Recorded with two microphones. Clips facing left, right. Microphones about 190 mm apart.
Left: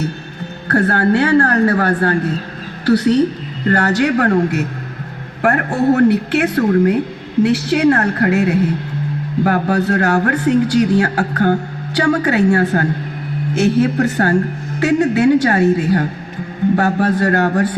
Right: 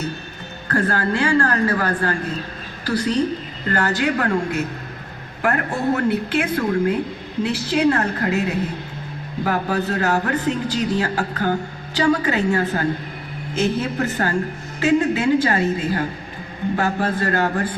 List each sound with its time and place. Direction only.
0.7 s a woman's voice: 70° left (ahead or behind)